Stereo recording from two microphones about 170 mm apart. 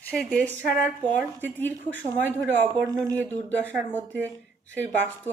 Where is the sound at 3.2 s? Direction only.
10° left (ahead or behind).